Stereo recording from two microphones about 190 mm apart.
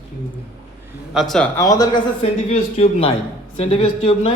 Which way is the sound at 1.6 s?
20° left (ahead or behind).